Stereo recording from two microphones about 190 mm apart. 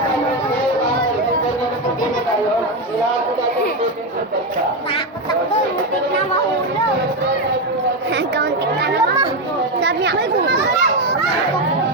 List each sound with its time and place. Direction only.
8.1 s chatter: 60° right (ahead or behind)